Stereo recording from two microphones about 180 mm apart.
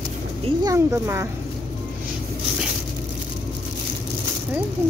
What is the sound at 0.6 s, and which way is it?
Speech, 15° right (ahead or behind).